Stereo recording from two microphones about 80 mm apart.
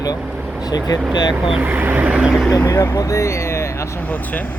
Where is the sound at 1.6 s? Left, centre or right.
Right.